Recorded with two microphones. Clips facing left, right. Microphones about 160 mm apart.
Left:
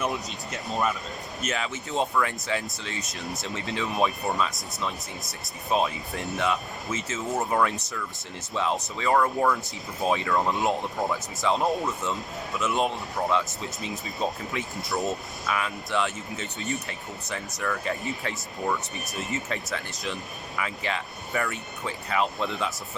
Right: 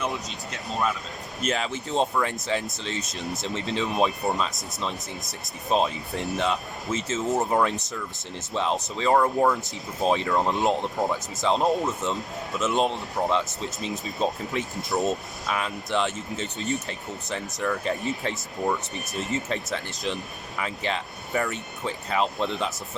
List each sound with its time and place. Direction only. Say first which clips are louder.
0.0 s speech: left 1 dB; centre (ahead or behind)
1.5 s speech: right 4 dB; 30° right (ahead or behind)
15.4 s speech: right 1 dB; 30° right (ahead or behind)